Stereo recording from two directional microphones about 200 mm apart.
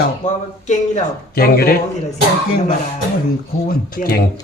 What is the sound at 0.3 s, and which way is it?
Speech, 35° left (ahead or behind).